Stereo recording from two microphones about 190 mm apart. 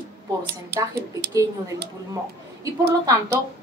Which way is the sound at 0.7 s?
60° right (ahead or behind).